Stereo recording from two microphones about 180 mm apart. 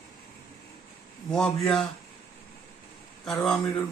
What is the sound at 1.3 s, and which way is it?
Speech, 5° left (ahead or behind).